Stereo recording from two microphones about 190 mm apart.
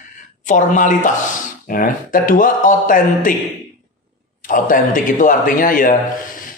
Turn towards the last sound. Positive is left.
turn(degrees=45)  # may be behind; listen again after turning